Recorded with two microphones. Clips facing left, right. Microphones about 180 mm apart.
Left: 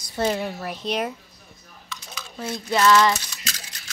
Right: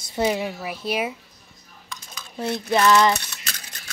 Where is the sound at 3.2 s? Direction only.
60° right (ahead or behind).